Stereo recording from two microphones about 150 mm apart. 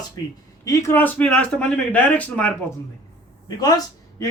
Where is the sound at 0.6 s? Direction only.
20° left (ahead or behind).